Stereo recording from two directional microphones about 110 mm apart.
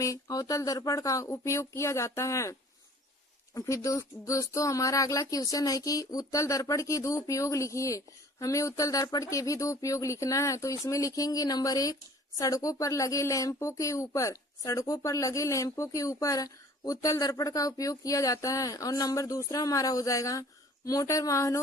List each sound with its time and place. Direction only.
0.0 s speech: 30° left (ahead or behind)